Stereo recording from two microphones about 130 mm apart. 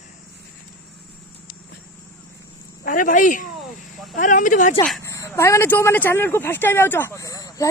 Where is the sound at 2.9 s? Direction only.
90° left.